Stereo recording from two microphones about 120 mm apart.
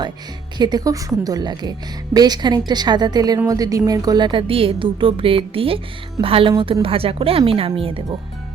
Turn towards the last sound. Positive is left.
turn(degrees=-50)  # may be behind; listen again after turning